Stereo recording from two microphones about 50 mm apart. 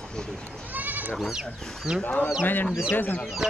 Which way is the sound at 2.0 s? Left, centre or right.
Left.